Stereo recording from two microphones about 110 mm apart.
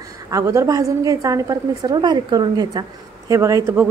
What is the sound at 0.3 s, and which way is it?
A woman's voice, 30° right (ahead or behind).